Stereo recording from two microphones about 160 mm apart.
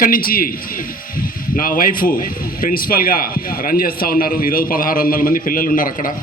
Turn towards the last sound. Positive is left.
turn(degrees=60)  # may be behind; listen again after turning